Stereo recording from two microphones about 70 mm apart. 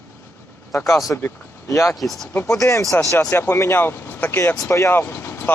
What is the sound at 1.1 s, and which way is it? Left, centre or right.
Speech, left.